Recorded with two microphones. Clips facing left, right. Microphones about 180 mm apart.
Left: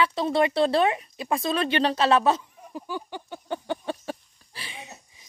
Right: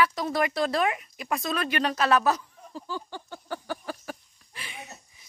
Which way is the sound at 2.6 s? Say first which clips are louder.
Left 2 dB; 15° left (ahead or behind).